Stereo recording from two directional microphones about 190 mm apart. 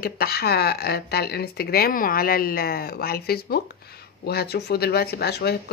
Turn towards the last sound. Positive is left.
turn(degrees=55)  # may be behind; listen again after turning